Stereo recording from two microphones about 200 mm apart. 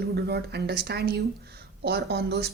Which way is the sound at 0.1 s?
55° right (ahead or behind).